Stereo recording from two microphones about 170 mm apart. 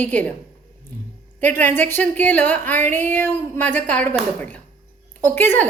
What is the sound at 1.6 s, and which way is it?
A woman's voice, 10° left (ahead or behind).